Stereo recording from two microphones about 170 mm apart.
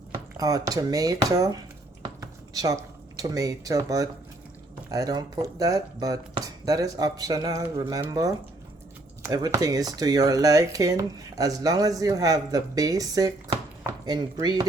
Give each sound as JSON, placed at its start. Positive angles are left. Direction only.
{"t": 0.3, "sound": "speech", "side_deg": -20}
{"t": 2.0, "sound": "a sound", "side_deg": -20}
{"t": 4.9, "sound": "speech", "side_deg": -20}